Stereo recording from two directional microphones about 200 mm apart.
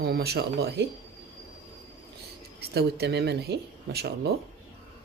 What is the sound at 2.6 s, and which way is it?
Speech, 55° right (ahead or behind).